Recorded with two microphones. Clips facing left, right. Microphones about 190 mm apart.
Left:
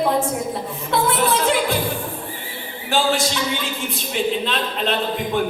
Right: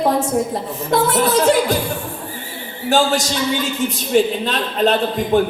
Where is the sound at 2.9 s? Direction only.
45° right (ahead or behind).